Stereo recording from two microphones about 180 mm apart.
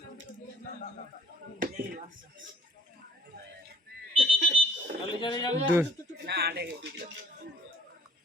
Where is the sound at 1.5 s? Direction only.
45° right (ahead or behind).